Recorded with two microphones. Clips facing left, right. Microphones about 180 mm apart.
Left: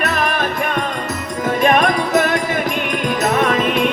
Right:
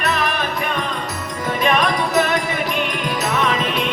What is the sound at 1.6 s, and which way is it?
Music, 50° left (ahead or behind).